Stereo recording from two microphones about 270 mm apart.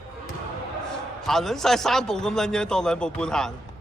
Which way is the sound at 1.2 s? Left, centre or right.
Centre.